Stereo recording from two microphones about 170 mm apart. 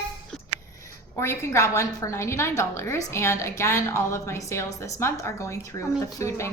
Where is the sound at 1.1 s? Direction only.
15° left (ahead or behind).